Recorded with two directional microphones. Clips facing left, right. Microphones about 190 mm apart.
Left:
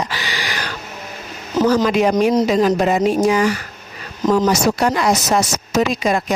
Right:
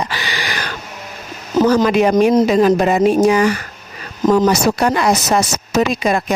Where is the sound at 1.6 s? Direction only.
50° right (ahead or behind).